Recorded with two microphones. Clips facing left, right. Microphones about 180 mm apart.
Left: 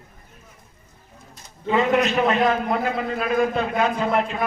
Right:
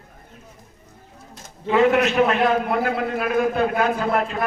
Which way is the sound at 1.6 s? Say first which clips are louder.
Right 2 dB; 5° right (ahead or behind).